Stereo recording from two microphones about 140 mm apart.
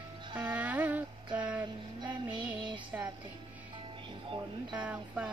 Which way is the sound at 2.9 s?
10° right (ahead or behind).